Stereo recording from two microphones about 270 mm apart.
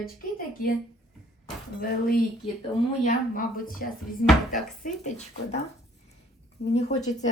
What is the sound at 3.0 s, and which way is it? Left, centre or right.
Speech, left.